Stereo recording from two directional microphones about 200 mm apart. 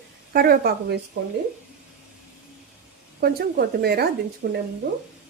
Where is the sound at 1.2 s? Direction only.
60° right (ahead or behind).